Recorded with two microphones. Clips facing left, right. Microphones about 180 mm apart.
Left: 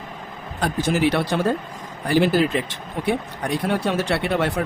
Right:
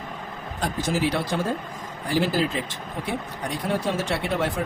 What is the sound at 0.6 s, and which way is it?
Speech, 65° left (ahead or behind).